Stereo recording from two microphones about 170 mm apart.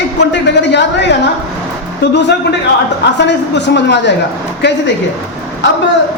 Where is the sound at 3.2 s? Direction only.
90° left.